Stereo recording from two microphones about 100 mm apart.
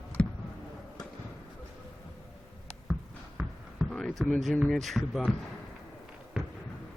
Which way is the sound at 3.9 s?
10° left (ahead or behind).